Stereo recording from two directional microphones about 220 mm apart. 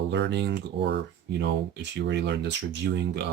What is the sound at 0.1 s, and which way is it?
Speech, 50° right (ahead or behind).